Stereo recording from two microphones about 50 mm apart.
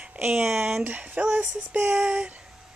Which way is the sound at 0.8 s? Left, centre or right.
Right.